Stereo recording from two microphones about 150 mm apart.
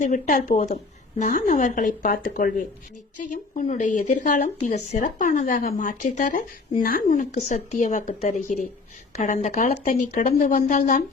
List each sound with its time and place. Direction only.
0.0 s speech: 60° left (ahead or behind)
3.7 s a woman's voice: 55° left (ahead or behind)